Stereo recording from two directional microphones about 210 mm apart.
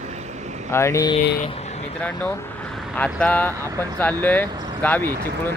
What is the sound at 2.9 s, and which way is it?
Speech, 5° left (ahead or behind).